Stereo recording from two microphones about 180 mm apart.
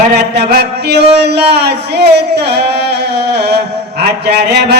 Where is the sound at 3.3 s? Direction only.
65° right (ahead or behind).